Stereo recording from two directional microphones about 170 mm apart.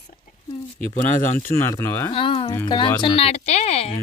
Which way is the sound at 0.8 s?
45° left (ahead or behind).